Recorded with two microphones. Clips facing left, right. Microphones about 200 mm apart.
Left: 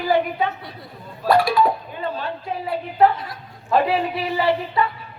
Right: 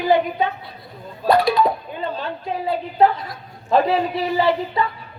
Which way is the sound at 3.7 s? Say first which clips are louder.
Right 2 dB; 25° right (ahead or behind).